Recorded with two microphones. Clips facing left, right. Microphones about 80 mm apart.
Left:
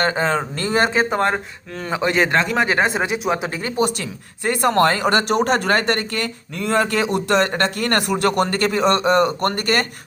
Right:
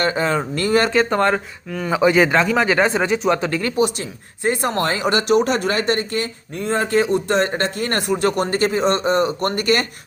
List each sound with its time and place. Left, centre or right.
0.0 s speech: left
1.1 s speech: centre
1.9 s speech: centre
3.7 s speech: left
3.9 s speech: left